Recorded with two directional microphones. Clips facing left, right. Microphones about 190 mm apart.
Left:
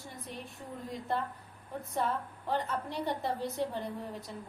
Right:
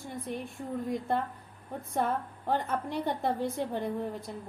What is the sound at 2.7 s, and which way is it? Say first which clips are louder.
A woman's voice: right 3 dB; 55° right (ahead or behind).